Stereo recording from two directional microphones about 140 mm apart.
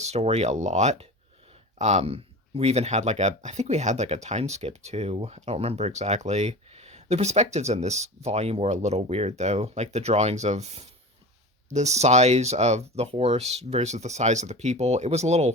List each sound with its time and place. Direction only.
0.0 s speech: 50° right (ahead or behind)